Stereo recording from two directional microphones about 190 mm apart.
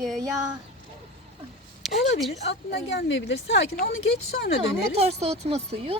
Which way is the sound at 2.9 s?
70° left (ahead or behind).